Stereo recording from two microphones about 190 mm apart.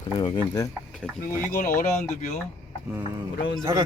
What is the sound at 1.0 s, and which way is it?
Speech, 5° left (ahead or behind).